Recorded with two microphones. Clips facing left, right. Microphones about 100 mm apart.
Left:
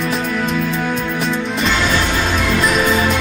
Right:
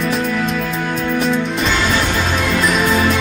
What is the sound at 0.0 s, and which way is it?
Music, centre (ahead or behind).